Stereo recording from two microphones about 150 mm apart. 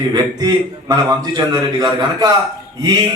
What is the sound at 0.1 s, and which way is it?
A man's voice, 25° right (ahead or behind).